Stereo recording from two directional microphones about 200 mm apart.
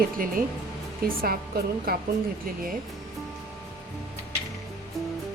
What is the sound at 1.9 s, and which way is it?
Speech, 50° right (ahead or behind).